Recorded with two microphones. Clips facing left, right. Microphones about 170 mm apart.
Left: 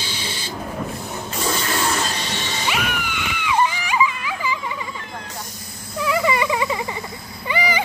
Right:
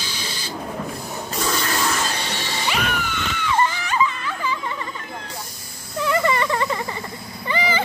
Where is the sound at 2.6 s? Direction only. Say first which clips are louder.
Right 1 dB; 5° left (ahead or behind).